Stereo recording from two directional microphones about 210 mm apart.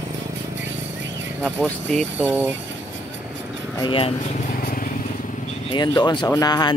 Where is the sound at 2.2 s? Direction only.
10° right (ahead or behind).